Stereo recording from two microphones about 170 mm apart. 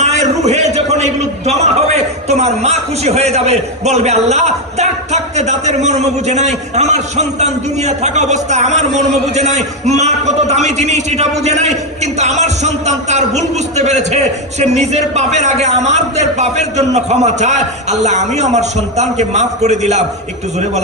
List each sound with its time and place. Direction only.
0.0 s a man's voice: 40° right (ahead or behind)